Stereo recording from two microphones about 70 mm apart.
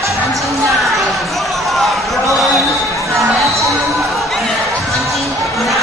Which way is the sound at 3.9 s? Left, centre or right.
Centre.